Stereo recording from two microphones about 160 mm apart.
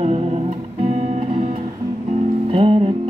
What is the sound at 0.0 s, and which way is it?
Music, 45° right (ahead or behind).